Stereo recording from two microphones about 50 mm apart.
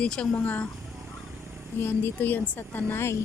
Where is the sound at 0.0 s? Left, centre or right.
Left.